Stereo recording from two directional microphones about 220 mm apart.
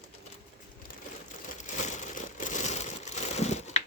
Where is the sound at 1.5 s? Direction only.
35° left (ahead or behind).